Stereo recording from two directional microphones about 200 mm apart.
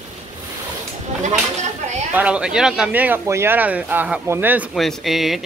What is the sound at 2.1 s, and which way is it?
Speech, 5° right (ahead or behind).